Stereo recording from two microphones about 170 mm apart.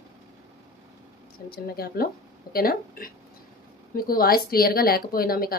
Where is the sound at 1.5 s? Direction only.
65° left (ahead or behind).